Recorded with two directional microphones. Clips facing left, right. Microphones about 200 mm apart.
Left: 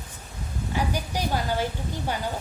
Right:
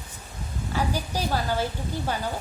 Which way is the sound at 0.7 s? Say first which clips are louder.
Even; 15° left (ahead or behind).